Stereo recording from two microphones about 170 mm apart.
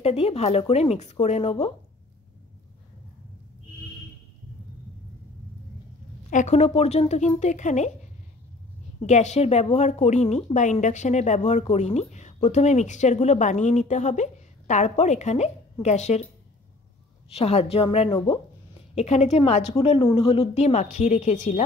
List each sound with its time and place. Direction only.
0.0 s a woman's voice: 35° left (ahead or behind)
6.3 s a woman's voice: 40° left (ahead or behind)
17.3 s a woman's voice: 40° left (ahead or behind)
18.1 s speech: 20° left (ahead or behind)
18.9 s a woman's voice: 40° left (ahead or behind)